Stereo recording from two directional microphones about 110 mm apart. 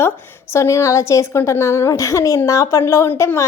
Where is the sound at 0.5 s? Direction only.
25° left (ahead or behind).